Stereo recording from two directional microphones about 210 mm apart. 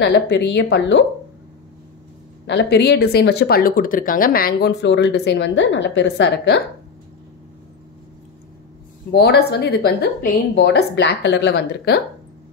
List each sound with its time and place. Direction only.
0.0 s a woman's voice: 55° left (ahead or behind)
2.4 s speech: 55° left (ahead or behind)
9.1 s speech: 50° left (ahead or behind)